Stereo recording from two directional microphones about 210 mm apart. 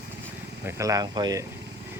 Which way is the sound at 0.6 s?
15° right (ahead or behind).